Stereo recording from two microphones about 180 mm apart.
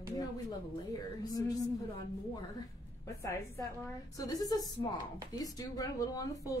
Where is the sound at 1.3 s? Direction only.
20° left (ahead or behind).